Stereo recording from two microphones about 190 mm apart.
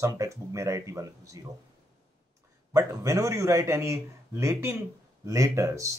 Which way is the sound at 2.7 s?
15° right (ahead or behind).